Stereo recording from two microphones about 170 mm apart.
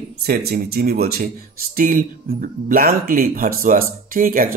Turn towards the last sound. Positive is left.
turn(degrees=-55)  # may be behind; listen again after turning